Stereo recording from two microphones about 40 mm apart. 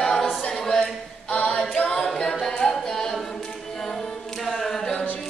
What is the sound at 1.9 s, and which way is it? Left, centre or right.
Music, centre.